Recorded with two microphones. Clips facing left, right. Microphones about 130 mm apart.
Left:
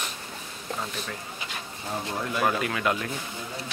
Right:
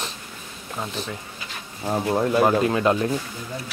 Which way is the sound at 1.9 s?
35° right (ahead or behind).